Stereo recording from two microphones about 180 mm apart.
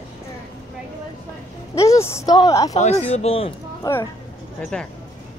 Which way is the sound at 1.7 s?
15° left (ahead or behind).